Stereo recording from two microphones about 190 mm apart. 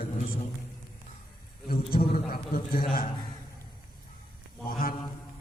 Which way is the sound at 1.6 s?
50° left (ahead or behind).